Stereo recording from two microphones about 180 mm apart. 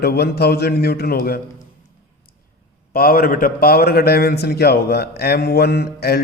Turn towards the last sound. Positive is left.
turn(degrees=60)  # may be behind; listen again after turning